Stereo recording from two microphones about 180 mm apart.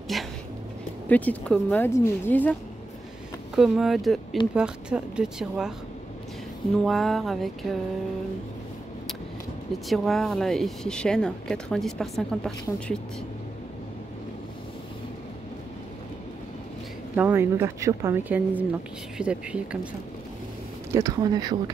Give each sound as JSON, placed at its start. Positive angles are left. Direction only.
{"t": 0.1, "sound": "speech", "side_deg": 0}
{"t": 3.5, "sound": "speech", "side_deg": 0}
{"t": 6.8, "sound": "speech", "side_deg": 0}
{"t": 9.8, "sound": "speech", "side_deg": 0}
{"t": 17.1, "sound": "a woman's voice", "side_deg": -10}
{"t": 20.9, "sound": "speech", "side_deg": -20}